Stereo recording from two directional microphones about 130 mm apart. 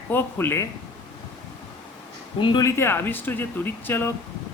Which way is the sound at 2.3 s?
40° left (ahead or behind).